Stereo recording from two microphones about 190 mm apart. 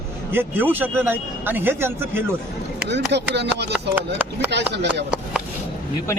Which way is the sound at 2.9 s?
65° right (ahead or behind).